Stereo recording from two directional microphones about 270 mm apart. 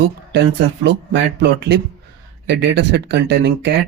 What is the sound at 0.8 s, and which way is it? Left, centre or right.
Speech, right.